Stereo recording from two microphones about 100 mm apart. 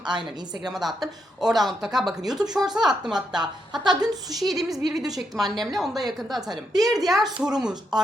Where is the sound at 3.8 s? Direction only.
45° right (ahead or behind).